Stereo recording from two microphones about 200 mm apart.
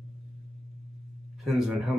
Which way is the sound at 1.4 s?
Centre (ahead or behind).